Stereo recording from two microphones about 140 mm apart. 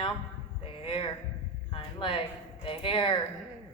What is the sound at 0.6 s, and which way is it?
A woman's voice, 40° left (ahead or behind).